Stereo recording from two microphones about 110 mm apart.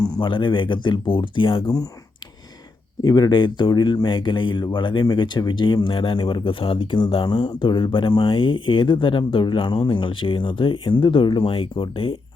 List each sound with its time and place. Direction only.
0.2 s speech: 50° left (ahead or behind)
1.6 s speech: 35° left (ahead or behind)
3.0 s speech: 40° left (ahead or behind); by 12.1 s 55° left (ahead or behind)